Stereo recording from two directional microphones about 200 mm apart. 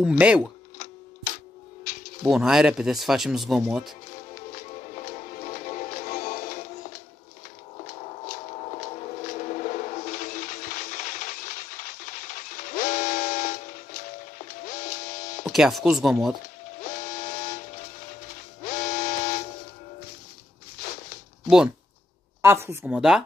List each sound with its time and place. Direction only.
0.0 s speech: 5° right (ahead or behind)
2.2 s speech: centre (ahead or behind)
4.4 s music: 40° left (ahead or behind)
7.8 s a sound: 35° left (ahead or behind)
15.4 s speech: centre (ahead or behind)
16.8 s steam whistle: 40° left (ahead or behind)
22.4 s speech: 15° right (ahead or behind)